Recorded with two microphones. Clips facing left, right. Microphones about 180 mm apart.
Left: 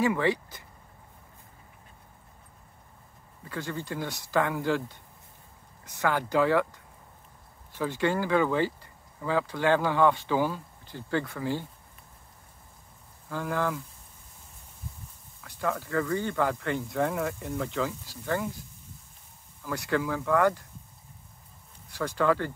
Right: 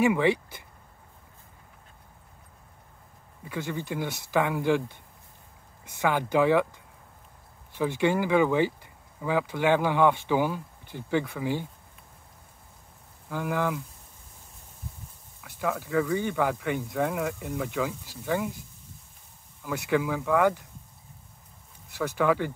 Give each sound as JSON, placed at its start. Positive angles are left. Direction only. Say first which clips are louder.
{"t": 0.0, "sound": "speech", "louder": "right 3 dB", "side_deg": -15}
{"t": 3.4, "sound": "speech", "louder": "right 2 dB", "side_deg": -15}
{"t": 5.9, "sound": "speech", "louder": "right 1 dB", "side_deg": -15}
{"t": 7.7, "sound": "speech", "louder": "right 3 dB", "side_deg": -15}
{"t": 13.3, "sound": "speech", "louder": "right 1 dB", "side_deg": -15}
{"t": 15.4, "sound": "speech", "louder": "right 1 dB", "side_deg": -10}
{"t": 19.6, "sound": "speech", "louder": "right 2 dB", "side_deg": -15}
{"t": 21.9, "sound": "speech", "louder": "right 1 dB", "side_deg": -10}